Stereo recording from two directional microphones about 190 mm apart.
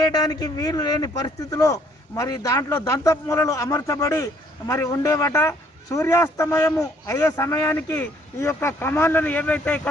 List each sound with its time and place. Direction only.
0.0 s speech: 20° left (ahead or behind)